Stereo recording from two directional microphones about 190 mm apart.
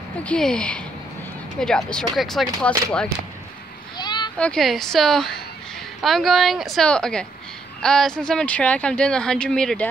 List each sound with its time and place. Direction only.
0.2 s speech: 5° left (ahead or behind)
3.9 s a sound: 25° left (ahead or behind)
4.4 s speech: 5° left (ahead or behind)